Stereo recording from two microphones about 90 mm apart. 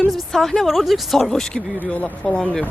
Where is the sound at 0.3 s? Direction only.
5° left (ahead or behind).